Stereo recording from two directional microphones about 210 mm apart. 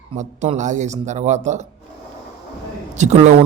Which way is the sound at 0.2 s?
35° right (ahead or behind).